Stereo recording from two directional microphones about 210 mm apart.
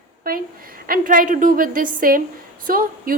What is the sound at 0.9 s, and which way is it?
A woman's voice, 40° right (ahead or behind).